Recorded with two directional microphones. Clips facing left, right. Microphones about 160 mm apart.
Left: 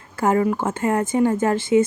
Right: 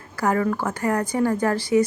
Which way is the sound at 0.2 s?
25° left (ahead or behind).